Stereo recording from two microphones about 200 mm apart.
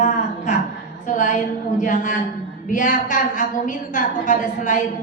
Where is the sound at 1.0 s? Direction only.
40° left (ahead or behind).